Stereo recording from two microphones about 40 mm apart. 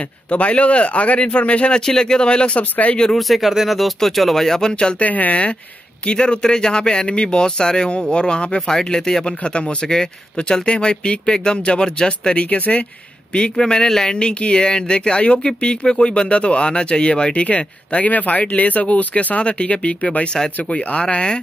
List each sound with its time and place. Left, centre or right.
0.3 s speech: left
1.7 s speech: centre
2.7 s speech: left
3.2 s speech: centre; by 5.0 s left
5.0 s speech: left
8.5 s speech: centre
12.4 s speech: left
13.3 s a man's voice: left
19.3 s speech: left